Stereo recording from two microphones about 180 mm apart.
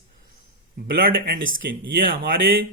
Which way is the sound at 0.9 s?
55° right (ahead or behind).